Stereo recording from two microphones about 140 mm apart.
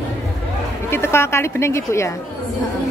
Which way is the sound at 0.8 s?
15° left (ahead or behind).